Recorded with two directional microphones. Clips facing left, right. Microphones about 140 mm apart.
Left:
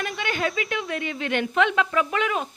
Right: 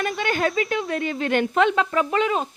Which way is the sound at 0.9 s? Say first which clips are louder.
Right 4 dB; 40° right (ahead or behind).